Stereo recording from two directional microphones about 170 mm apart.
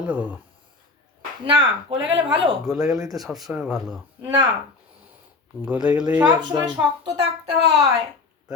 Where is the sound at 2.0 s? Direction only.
90° right.